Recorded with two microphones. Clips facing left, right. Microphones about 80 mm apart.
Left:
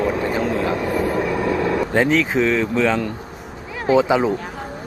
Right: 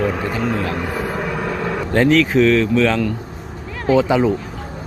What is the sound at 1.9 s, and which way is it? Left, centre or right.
Speech, centre.